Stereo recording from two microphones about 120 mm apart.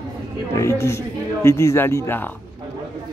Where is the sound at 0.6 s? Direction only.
25° left (ahead or behind).